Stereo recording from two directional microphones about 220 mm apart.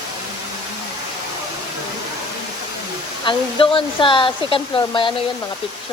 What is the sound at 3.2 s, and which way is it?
Speech, 25° left (ahead or behind).